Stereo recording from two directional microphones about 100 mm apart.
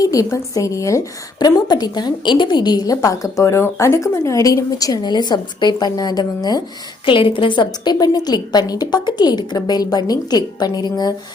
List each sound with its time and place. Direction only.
0.0 s a woman's voice: 35° left (ahead or behind)
7.0 s a woman's voice: 60° left (ahead or behind); by 11.1 s 45° left (ahead or behind)